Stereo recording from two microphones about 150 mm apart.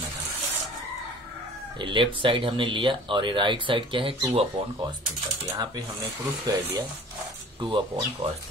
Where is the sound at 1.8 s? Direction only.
35° right (ahead or behind).